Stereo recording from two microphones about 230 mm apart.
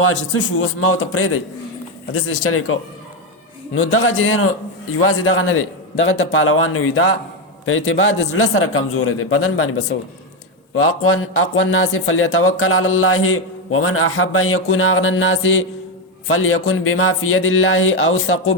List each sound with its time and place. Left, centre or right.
0.6 s speech: left
3.9 s speech: left
10.8 s speech: left